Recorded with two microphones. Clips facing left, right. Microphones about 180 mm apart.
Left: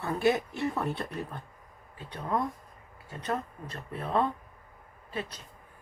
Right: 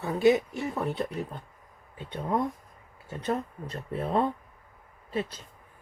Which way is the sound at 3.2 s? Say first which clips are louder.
Right 3 dB; 25° right (ahead or behind).